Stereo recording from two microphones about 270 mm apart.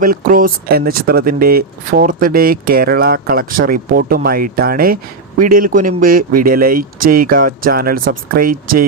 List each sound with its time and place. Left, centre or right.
0.0 s speech: right